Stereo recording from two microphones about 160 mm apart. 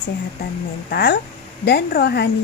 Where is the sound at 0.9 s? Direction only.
80° left.